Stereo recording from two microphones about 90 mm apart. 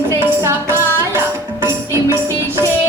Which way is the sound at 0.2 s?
25° right (ahead or behind).